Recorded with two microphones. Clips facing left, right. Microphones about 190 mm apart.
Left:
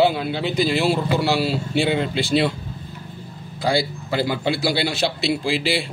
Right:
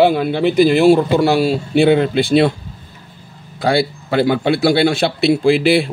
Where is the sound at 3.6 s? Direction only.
60° right (ahead or behind).